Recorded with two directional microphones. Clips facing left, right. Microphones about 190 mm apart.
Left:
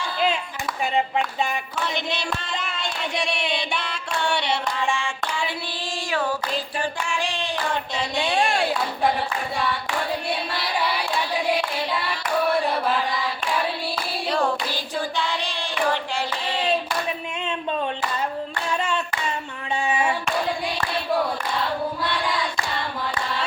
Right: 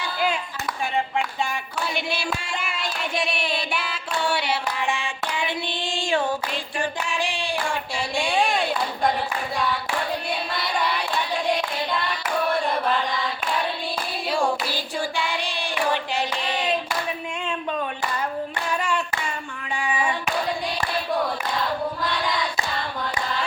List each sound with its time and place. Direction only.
1.8 s child singing: 10° right (ahead or behind)
4.5 s child singing: 15° right (ahead or behind)
7.4 s a sound: 10° right (ahead or behind)
8.3 s child singing: centre (ahead or behind)
10.2 s singing: centre (ahead or behind)
12.6 s chant: 5° left (ahead or behind)
14.3 s hands: 10° right (ahead or behind)
18.7 s hands: 25° left (ahead or behind)